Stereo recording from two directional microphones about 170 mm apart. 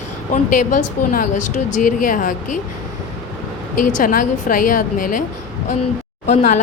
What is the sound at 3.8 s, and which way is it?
A woman's voice, 50° left (ahead or behind).